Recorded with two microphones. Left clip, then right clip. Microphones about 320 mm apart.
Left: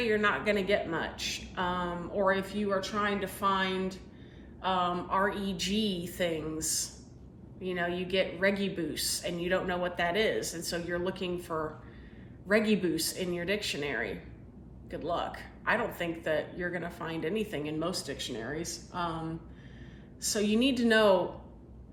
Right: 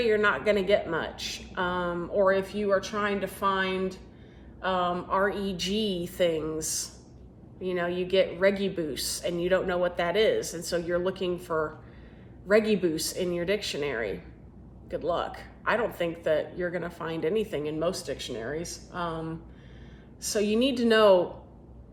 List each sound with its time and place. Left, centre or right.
0.0 s a woman's voice: centre
4.6 s a woman's voice: centre
20.2 s a woman's voice: centre